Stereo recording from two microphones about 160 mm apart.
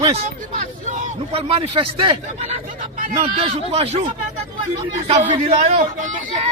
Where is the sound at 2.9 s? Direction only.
60° right (ahead or behind).